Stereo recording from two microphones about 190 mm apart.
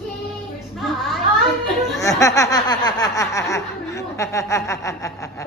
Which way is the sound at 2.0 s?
15° left (ahead or behind).